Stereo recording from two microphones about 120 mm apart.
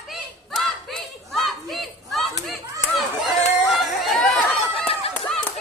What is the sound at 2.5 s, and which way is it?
Chatter, centre (ahead or behind).